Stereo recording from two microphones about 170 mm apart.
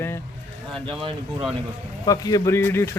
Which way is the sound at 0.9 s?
30° right (ahead or behind).